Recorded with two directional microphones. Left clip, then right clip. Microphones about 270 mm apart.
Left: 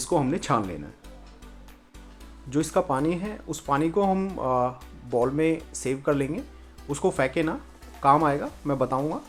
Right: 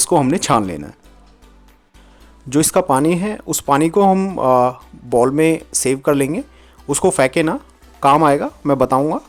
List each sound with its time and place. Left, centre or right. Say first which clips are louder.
0.0 s speech: right 10 dB; right
2.5 s speech: right 10 dB; right